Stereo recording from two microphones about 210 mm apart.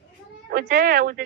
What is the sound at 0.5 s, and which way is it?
Speech, 45° right (ahead or behind).